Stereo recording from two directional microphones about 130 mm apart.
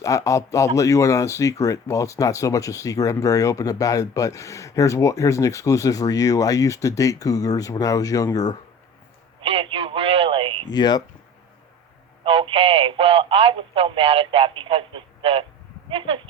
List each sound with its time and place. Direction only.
0.0 s speech: 25° left (ahead or behind)
9.4 s radio: 45° right (ahead or behind)
10.7 s speech: 30° left (ahead or behind)
12.2 s speech: 45° right (ahead or behind)
15.9 s sheep: 45° right (ahead or behind)